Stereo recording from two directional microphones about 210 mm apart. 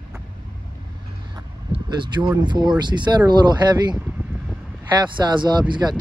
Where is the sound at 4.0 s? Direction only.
10° right (ahead or behind).